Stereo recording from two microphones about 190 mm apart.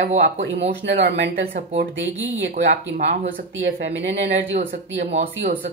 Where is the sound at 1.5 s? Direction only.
45° right (ahead or behind).